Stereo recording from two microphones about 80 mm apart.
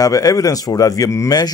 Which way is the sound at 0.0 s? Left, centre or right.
Left.